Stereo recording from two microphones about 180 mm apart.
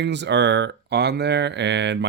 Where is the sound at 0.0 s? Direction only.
75° right (ahead or behind).